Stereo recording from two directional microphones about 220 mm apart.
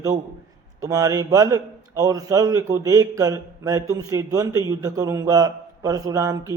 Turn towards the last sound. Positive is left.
turn(degrees=-15)  # may be behind; listen again after turning